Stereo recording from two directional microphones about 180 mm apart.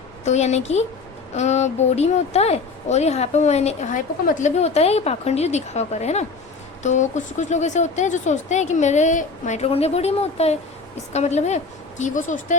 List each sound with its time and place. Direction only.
0.3 s speech: 40° left (ahead or behind)